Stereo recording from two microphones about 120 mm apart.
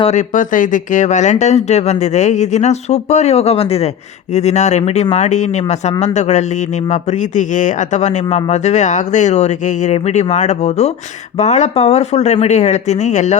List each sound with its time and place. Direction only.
0.1 s speech: 90° left; by 3.8 s 55° left (ahead or behind)
4.4 s speech: 70° left (ahead or behind)
5.1 s speech: 75° left (ahead or behind)